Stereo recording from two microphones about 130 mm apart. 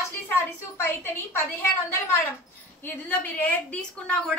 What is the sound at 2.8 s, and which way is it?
A woman's voice, 15° left (ahead or behind).